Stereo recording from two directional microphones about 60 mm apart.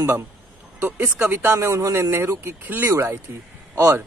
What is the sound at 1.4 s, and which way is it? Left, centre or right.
Speech, right.